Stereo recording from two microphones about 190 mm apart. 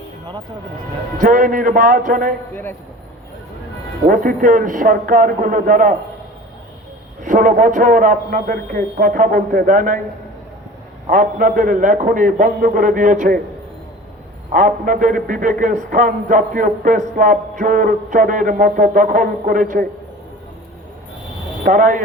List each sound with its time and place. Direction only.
1.2 s a man's voice: 45° right (ahead or behind)
4.1 s a man's voice: 45° right (ahead or behind)
7.2 s a man's voice: 45° right (ahead or behind)
11.0 s a man's voice: 45° right (ahead or behind)
14.5 s a man's voice: 45° right (ahead or behind)
21.6 s a man's voice: 45° right (ahead or behind)